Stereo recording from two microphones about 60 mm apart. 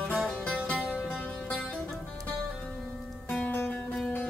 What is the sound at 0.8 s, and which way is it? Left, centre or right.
Music, centre.